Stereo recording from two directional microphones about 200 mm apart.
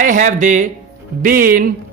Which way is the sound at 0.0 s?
40° right (ahead or behind).